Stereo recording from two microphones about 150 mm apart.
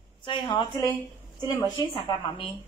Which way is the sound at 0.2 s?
30° left (ahead or behind).